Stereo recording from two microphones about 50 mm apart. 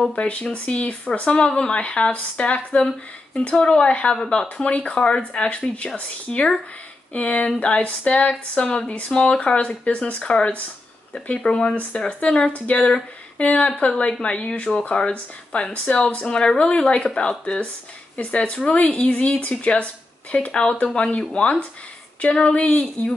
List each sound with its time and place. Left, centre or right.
0.1 s speech: left
11.1 s speech: centre
13.4 s speech: left